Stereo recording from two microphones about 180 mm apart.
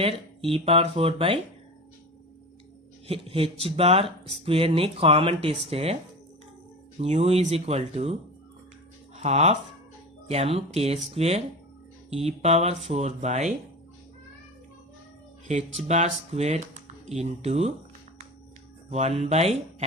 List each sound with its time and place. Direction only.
0.0 s speech: 30° right (ahead or behind)
3.1 s speech: 30° right (ahead or behind)
7.0 s speech: 35° right (ahead or behind)
9.1 s speech: 35° right (ahead or behind)
15.4 s speech: 40° right (ahead or behind)
18.9 s speech: 35° right (ahead or behind)